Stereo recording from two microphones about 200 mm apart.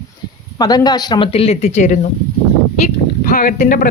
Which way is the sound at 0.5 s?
20° left (ahead or behind).